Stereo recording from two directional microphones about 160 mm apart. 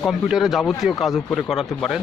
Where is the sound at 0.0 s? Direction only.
Centre (ahead or behind).